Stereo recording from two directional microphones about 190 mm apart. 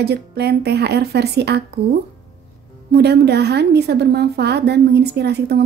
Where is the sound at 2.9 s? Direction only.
60° right (ahead or behind).